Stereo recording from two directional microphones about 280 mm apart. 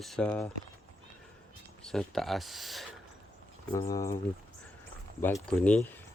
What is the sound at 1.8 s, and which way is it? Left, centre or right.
Speech, centre.